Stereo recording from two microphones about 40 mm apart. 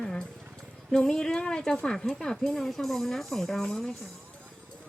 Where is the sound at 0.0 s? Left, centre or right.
Centre.